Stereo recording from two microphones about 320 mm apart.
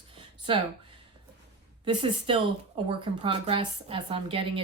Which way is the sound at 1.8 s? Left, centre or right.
Centre.